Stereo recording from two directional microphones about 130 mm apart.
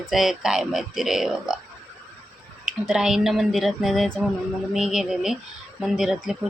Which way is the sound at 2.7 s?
5° right (ahead or behind).